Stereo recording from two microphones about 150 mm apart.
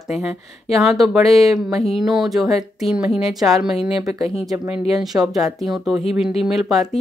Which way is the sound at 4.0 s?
25° right (ahead or behind).